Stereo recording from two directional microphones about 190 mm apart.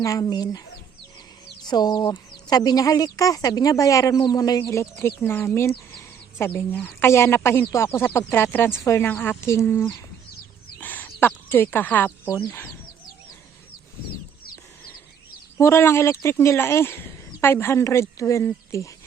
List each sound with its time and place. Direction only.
0.0 s speech: 15° left (ahead or behind)
1.6 s a woman's voice: 20° left (ahead or behind)
10.8 s a sound: 10° left (ahead or behind)
15.5 s a woman's voice: 15° left (ahead or behind)